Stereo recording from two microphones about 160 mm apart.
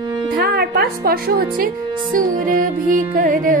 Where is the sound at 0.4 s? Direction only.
80° right.